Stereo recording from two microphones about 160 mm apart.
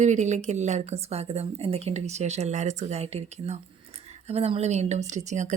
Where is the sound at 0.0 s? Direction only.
45° right (ahead or behind).